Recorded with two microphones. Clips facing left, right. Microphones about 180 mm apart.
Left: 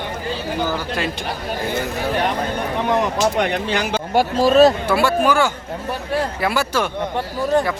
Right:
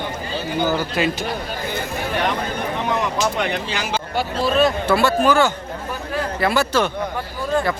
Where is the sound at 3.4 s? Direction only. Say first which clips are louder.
Left 4 dB; 60° left (ahead or behind).